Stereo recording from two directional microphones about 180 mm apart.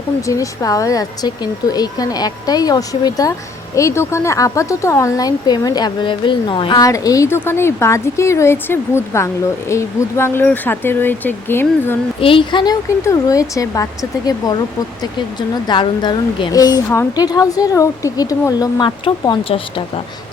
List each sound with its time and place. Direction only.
0.2 s speech: 20° left (ahead or behind)
12.2 s speech: 30° left (ahead or behind)